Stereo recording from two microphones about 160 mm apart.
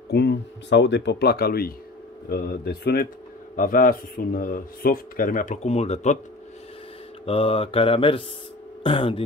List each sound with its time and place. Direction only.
0.1 s speech: 90° left; by 3.1 s 75° left (ahead or behind)
3.5 s speech: 55° left (ahead or behind)
7.2 s mantra: 35° left (ahead or behind)